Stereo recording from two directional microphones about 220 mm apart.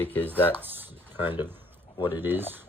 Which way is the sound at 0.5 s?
10° right (ahead or behind).